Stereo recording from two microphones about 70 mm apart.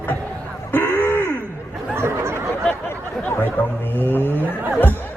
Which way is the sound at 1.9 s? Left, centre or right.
Right.